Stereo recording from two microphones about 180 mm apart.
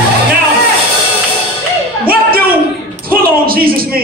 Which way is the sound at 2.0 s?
55° right (ahead or behind).